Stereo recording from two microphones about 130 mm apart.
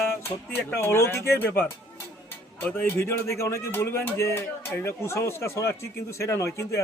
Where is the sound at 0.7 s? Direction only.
20° left (ahead or behind).